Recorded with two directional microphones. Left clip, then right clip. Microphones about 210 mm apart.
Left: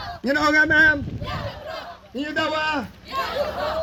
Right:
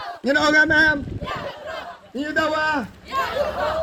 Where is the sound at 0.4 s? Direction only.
50° right (ahead or behind).